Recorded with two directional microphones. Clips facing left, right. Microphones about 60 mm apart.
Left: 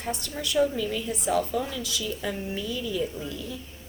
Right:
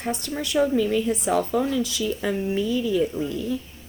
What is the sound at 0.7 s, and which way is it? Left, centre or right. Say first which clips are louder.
A woman's voice: right 8 dB; right.